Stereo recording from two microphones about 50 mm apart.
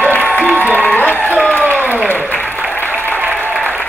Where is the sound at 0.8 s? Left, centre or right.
Left.